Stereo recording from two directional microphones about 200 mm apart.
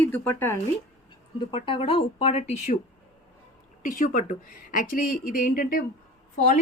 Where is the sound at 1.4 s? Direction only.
25° left (ahead or behind).